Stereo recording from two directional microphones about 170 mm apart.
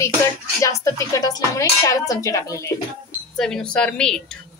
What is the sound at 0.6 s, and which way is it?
Speech, 20° left (ahead or behind).